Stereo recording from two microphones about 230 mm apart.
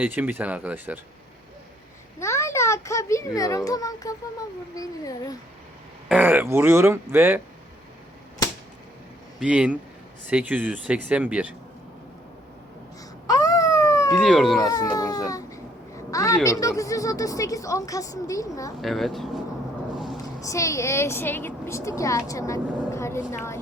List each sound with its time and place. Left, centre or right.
0.0 s speech: centre
2.1 s a child's voice: centre
6.1 s speech: centre
9.4 s speech: centre
13.2 s a sound: centre
14.2 s speech: centre
14.6 s a woman's voice: centre
18.8 s speech: centre
20.4 s a woman's voice: centre